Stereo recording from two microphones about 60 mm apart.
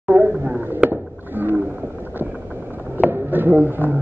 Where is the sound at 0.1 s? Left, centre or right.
Right.